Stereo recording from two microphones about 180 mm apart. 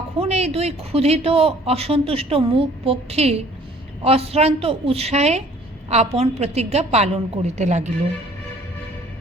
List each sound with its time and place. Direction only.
0.2 s speech: 35° right (ahead or behind)